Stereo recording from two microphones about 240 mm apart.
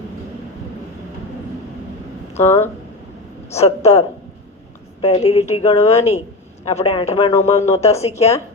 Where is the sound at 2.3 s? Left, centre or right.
Centre.